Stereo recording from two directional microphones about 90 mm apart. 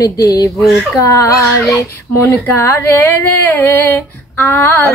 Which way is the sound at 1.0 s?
35° left (ahead or behind).